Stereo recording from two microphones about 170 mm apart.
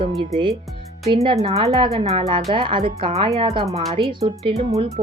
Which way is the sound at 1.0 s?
35° right (ahead or behind).